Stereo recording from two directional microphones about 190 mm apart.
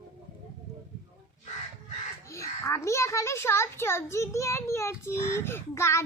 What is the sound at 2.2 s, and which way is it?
A child's voice, 15° left (ahead or behind).